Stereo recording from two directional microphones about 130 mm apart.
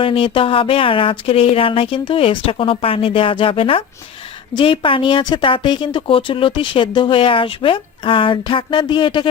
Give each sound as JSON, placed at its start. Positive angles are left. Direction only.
{"t": 0.0, "sound": "a woman's voice", "side_deg": 45}